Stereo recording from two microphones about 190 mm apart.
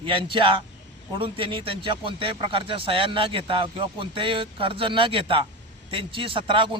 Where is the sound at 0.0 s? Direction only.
25° right (ahead or behind).